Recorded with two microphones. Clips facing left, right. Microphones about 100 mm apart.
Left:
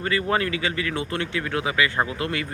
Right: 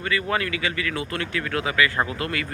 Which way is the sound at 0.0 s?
30° left (ahead or behind).